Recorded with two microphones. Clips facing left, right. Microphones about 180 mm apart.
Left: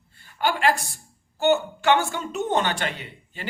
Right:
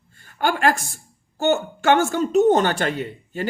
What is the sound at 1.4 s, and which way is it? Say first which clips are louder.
A woman's voice: even; 45° right (ahead or behind).